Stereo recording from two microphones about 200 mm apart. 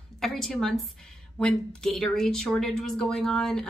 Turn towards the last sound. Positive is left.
turn(degrees=5)  # may be behind; listen again after turning